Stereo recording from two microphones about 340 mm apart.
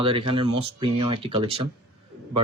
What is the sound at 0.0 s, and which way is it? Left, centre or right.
Speech, centre.